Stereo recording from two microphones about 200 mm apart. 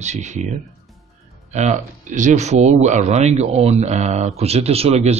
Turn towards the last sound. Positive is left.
turn(degrees=-30)  # may be behind; listen again after turning